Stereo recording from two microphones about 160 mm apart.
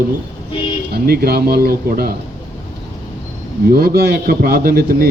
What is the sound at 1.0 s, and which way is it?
A man's voice, 75° right (ahead or behind).